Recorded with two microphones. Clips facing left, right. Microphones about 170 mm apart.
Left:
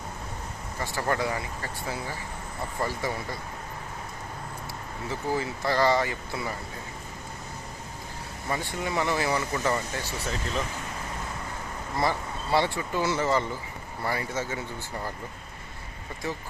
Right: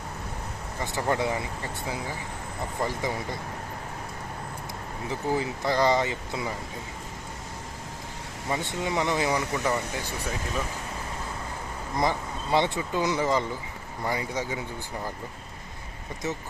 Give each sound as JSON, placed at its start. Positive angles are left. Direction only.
{"t": 0.8, "sound": "speech", "side_deg": -15}
{"t": 5.0, "sound": "speech", "side_deg": -15}
{"t": 8.4, "sound": "speech", "side_deg": -20}
{"t": 11.9, "sound": "speech", "side_deg": -20}
{"t": 16.2, "sound": "speech", "side_deg": -20}